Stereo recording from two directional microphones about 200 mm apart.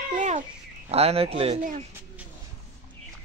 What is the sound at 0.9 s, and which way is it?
Speech, 30° right (ahead or behind).